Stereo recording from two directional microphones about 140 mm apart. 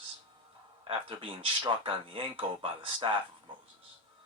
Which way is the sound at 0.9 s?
40° right (ahead or behind).